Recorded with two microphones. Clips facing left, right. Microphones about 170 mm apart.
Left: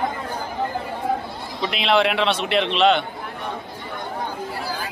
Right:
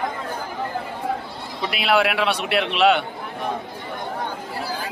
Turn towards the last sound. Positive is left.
turn(degrees=-5)  # may be behind; listen again after turning